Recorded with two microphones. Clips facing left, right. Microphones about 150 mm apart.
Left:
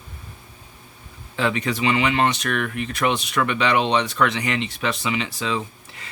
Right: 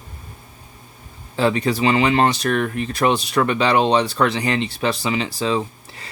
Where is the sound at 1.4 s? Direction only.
35° right (ahead or behind).